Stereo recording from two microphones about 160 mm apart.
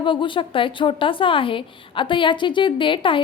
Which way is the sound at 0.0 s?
30° left (ahead or behind).